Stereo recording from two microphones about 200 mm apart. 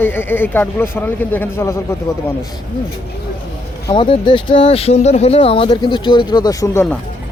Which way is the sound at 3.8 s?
25° left (ahead or behind).